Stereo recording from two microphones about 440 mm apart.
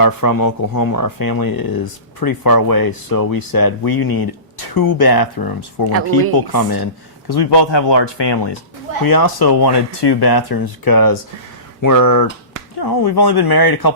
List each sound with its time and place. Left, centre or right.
0.0 s speech: left
9.0 s speech: left